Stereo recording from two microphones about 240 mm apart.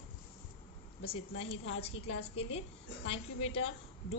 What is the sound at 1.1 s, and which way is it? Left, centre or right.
A woman's voice, left.